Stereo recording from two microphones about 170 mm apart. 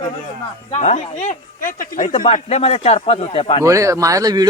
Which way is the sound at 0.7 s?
40° left (ahead or behind).